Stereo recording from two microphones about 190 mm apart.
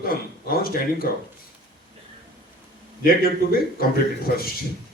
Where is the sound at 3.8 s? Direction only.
50° left (ahead or behind).